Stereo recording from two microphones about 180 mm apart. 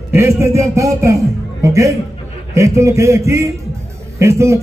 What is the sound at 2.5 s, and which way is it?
A man's voice, 15° right (ahead or behind).